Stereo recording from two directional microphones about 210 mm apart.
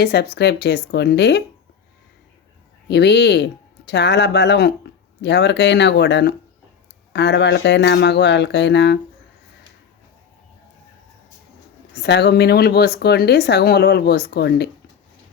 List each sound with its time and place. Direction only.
0.0 s speech: 50° left (ahead or behind)
2.9 s speech: 55° left (ahead or behind)
11.9 s speech: 55° left (ahead or behind)